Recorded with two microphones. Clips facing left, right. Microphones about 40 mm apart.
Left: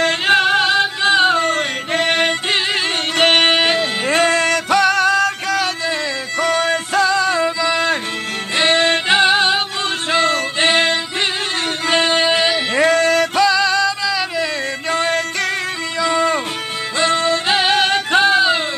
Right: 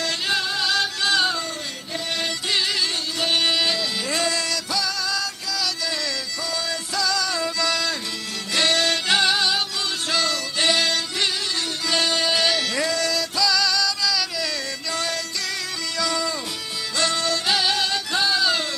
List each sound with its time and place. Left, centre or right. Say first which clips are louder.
0.0 s music: left 10 dB; left
0.7 s music: left 7 dB; left
1.4 s music: left 13 dB; left
12.7 s female singing: left 10 dB; left
16.0 s music: left 9 dB; left